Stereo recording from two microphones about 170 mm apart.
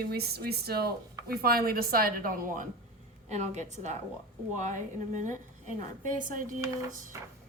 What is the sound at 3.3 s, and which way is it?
Speech, 45° right (ahead or behind).